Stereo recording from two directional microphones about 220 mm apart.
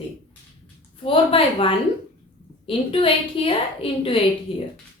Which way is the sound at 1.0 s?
25° left (ahead or behind).